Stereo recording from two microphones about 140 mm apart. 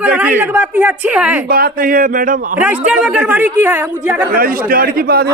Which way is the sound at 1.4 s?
90° right.